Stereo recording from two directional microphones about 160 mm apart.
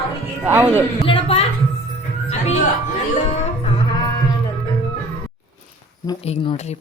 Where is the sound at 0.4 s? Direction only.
10° right (ahead or behind).